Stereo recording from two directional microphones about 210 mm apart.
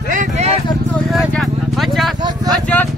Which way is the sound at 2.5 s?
5° left (ahead or behind).